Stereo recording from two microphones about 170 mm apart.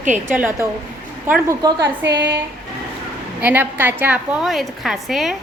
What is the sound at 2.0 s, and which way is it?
Speech, 90° right.